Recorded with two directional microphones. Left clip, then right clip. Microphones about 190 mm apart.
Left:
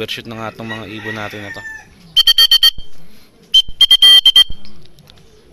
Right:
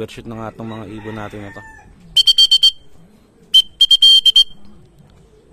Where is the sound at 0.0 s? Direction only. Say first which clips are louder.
Left 5 dB; 15° right (ahead or behind).